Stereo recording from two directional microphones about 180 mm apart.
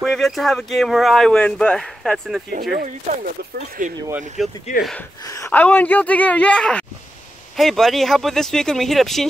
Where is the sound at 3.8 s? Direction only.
45° right (ahead or behind).